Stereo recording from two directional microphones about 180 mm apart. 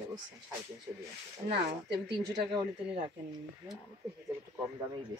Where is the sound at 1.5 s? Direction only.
65° right (ahead or behind).